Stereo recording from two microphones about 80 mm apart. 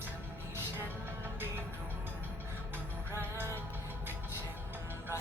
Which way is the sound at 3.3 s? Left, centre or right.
Right.